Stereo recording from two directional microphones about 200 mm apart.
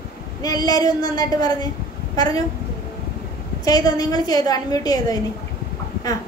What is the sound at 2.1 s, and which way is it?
Speech, 20° left (ahead or behind).